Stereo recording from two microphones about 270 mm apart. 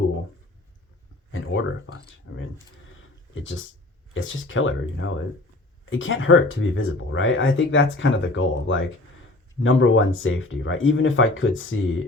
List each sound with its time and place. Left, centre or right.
2.3 s speech: left